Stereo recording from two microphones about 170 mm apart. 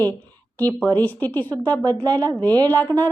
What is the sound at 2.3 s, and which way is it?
Speech, 25° right (ahead or behind).